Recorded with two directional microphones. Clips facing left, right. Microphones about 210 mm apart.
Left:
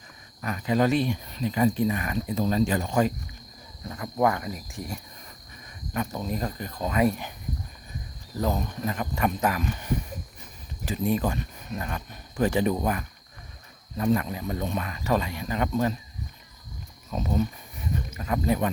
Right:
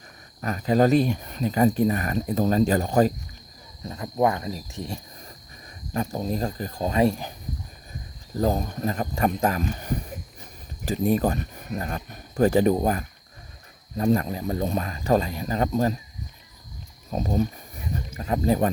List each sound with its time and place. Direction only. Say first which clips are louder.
0.4 s speech: right 4 dB; 40° right (ahead or behind)
3.8 s speech: right 2 dB; 25° right (ahead or behind)
8.4 s speech: right 4 dB; 35° right (ahead or behind)
17.1 s speech: right 2 dB; 35° right (ahead or behind)